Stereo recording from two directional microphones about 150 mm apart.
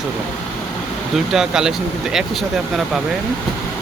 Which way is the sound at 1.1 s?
5° right (ahead or behind).